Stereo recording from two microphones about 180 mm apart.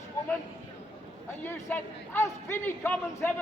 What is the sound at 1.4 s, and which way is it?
A man's voice, 15° left (ahead or behind).